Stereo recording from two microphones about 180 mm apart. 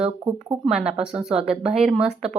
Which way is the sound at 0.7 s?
5° right (ahead or behind).